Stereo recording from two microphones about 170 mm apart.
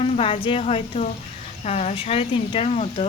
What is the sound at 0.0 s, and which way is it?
Speech, 35° left (ahead or behind).